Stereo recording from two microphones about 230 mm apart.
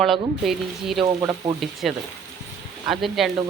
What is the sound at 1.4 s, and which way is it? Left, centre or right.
Frying, centre.